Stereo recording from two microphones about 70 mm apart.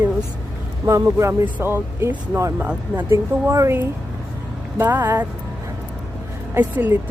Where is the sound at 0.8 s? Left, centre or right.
Right.